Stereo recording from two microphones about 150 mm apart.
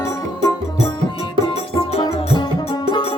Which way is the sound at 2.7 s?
25° left (ahead or behind).